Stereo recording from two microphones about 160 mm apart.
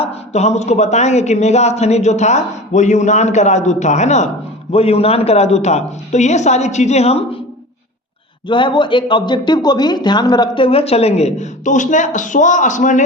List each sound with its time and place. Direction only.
0.0 s speech: 45° left (ahead or behind)
8.4 s speech: 30° left (ahead or behind); by 13.0 s 50° left (ahead or behind)